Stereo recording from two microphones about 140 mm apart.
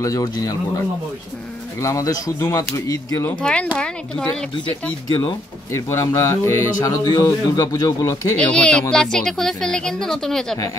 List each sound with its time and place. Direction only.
0.0 s speech: 25° left (ahead or behind)
1.8 s speech: 20° left (ahead or behind)
3.3 s speech: 10° left (ahead or behind)
5.7 s speech: 20° left (ahead or behind)
8.4 s speech: 5° left (ahead or behind)